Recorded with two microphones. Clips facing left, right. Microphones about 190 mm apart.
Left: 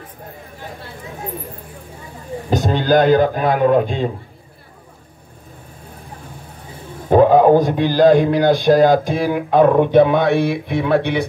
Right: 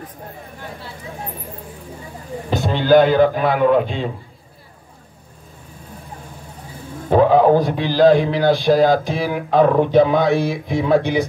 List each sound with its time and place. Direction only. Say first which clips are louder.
2.5 s speech: right 1 dB; 45° left (ahead or behind)
7.2 s a sound: left 2 dB; 50° left (ahead or behind)
7.6 s speech: left 1 dB; 50° left (ahead or behind)